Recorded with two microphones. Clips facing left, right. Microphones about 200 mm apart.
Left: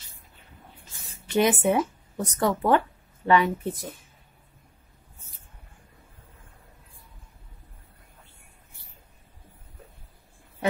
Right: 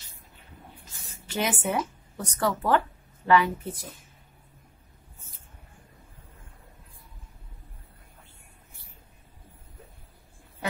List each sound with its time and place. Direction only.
1.3 s speech: 20° left (ahead or behind)